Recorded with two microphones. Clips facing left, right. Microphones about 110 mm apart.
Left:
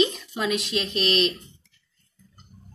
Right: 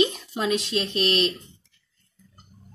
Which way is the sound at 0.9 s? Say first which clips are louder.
Left 1 dB; 20° left (ahead or behind).